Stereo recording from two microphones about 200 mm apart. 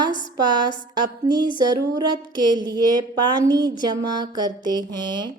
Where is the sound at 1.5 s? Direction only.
20° right (ahead or behind).